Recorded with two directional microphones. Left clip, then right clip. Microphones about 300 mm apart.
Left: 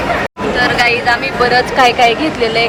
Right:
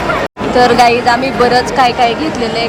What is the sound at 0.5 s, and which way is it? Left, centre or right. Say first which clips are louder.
Speech: right 5 dB; centre.